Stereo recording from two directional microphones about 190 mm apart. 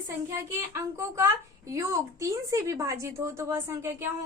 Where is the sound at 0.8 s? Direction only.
15° right (ahead or behind).